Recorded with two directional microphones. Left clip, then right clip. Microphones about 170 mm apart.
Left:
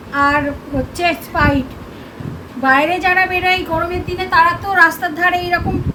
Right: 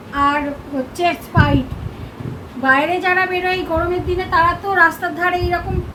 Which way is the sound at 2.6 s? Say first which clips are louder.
Left 2 dB; 20° left (ahead or behind).